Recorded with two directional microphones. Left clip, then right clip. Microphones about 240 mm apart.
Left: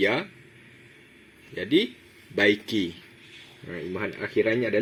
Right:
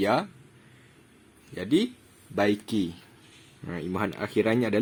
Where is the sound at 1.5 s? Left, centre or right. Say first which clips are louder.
Left 2 dB; centre.